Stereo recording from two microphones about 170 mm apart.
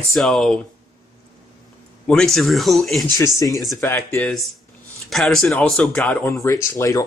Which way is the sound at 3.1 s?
20° left (ahead or behind).